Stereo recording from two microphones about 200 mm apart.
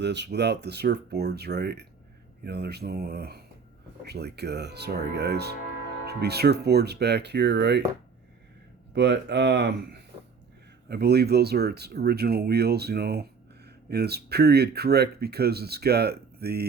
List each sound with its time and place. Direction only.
0.0 s speech: 60° right (ahead or behind)
9.0 s speech: 60° right (ahead or behind)